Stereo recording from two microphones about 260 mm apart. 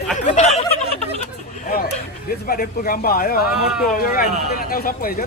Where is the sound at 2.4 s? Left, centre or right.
Left.